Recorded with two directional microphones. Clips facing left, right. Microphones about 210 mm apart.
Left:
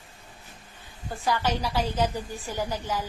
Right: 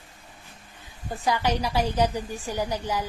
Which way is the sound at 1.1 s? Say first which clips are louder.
Right 2 dB; 15° right (ahead or behind).